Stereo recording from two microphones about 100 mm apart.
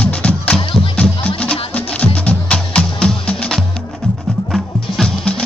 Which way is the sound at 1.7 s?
10° left (ahead or behind).